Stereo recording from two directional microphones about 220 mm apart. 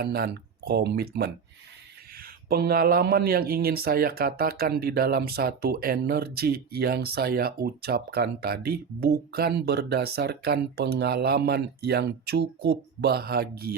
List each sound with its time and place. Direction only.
0.0 s speech: 45° right (ahead or behind)
2.5 s speech: 45° right (ahead or behind)